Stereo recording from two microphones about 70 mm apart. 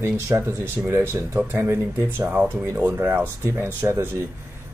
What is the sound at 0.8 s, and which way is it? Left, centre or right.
Speech, right.